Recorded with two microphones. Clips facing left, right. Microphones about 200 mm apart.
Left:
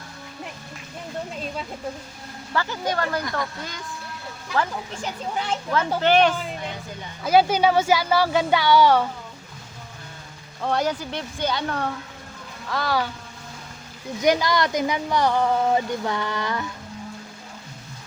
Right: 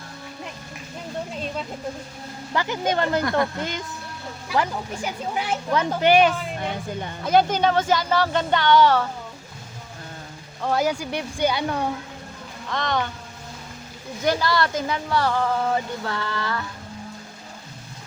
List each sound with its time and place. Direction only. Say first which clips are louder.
2.5 s speech: right 2 dB; 15° right (ahead or behind)
4.4 s speech: right 1 dB; 10° right (ahead or behind)
6.6 s speech: right 5 dB; 55° right (ahead or behind)
7.3 s speech: left 1 dB; 5° left (ahead or behind)
10.6 s speech: right 1 dB; 5° right (ahead or behind)
12.6 s speech: left 1 dB; 5° left (ahead or behind)
14.2 s speech: left 2 dB; 15° left (ahead or behind)